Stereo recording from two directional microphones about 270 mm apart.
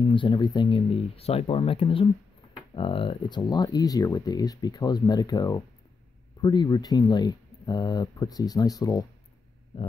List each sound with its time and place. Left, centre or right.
0.1 s speech: centre